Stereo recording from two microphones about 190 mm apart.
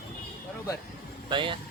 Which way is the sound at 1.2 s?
25° right (ahead or behind).